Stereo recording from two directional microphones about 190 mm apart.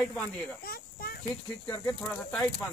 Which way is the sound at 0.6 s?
55° left (ahead or behind).